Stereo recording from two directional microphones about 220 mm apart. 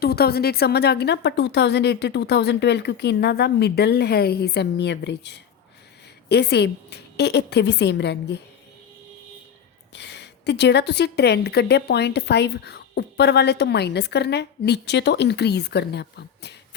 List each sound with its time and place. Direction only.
0.0 s a woman's voice: 45° left (ahead or behind)
9.9 s a woman's voice: 50° left (ahead or behind)